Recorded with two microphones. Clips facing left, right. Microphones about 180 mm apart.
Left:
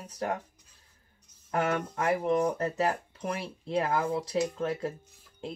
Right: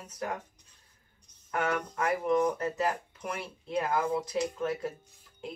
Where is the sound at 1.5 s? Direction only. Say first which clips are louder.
Left 2 dB; 30° left (ahead or behind).